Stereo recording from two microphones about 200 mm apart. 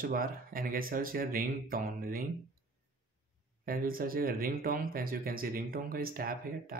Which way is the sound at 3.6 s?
45° right (ahead or behind).